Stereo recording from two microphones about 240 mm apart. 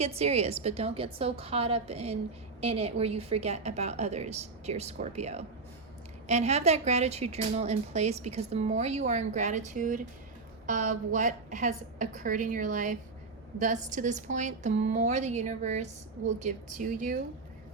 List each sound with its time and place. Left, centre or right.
0.0 s a woman's voice: right